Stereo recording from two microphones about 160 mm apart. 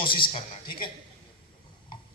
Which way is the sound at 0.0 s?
30° left (ahead or behind).